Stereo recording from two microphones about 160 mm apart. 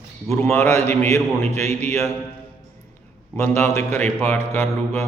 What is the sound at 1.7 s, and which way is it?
Speech, 45° right (ahead or behind).